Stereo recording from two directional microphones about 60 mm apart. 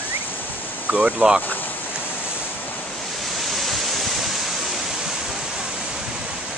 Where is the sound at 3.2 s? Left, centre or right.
Centre.